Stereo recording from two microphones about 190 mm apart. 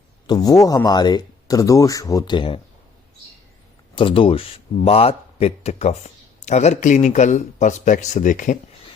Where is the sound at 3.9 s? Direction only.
25° left (ahead or behind); by 8.6 s 45° left (ahead or behind).